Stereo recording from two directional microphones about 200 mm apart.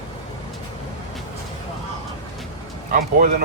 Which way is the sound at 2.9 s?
50° right (ahead or behind).